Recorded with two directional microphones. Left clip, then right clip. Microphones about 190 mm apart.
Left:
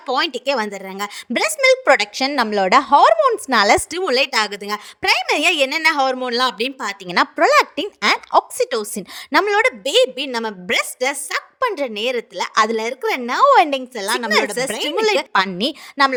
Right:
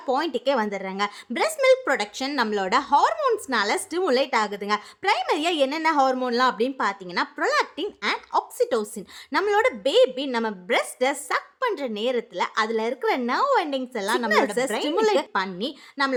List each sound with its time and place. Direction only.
0.0 s a woman's voice: 35° left (ahead or behind)